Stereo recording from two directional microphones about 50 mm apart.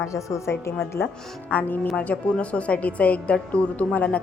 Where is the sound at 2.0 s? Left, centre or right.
Left.